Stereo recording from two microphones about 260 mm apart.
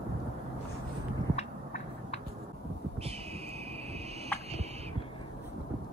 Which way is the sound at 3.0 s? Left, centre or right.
Right.